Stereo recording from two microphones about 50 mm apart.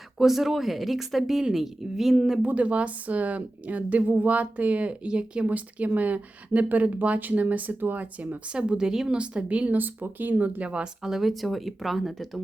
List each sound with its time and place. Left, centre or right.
0.2 s speech: centre
2.5 s a woman's voice: right
5.5 s speech: right
8.5 s speech: centre; by 10.5 s right
10.6 s a woman's voice: right
11.0 s speech: centre